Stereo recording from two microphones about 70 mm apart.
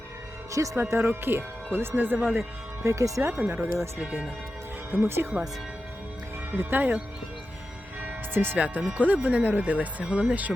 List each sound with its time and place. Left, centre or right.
0.8 s speech: right
2.8 s speech: right
4.9 s speech: right
6.6 s speech: right
8.0 s music: right
8.5 s speech: centre